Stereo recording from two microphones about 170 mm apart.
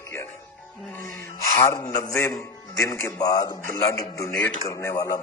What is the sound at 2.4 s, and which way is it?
Speech, 20° left (ahead or behind).